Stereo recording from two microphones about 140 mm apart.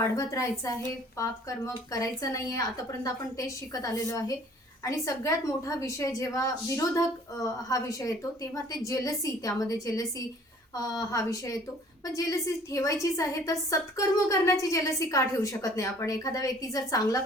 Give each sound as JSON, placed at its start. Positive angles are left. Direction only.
{"t": 0.2, "sound": "a woman's voice", "side_deg": 25}